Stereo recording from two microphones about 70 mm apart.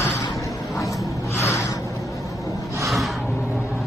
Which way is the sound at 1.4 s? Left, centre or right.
Left.